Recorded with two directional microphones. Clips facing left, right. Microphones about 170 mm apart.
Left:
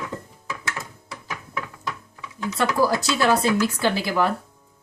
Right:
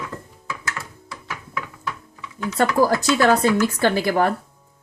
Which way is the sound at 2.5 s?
50° right (ahead or behind).